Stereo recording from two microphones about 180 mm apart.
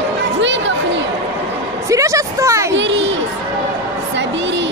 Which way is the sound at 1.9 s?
15° right (ahead or behind).